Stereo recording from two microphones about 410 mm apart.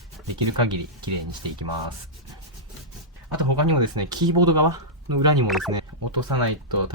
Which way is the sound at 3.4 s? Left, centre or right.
Right.